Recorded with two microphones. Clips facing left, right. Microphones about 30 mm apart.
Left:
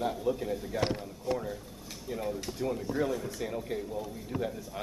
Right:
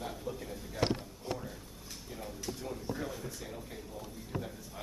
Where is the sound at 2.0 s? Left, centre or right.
Left.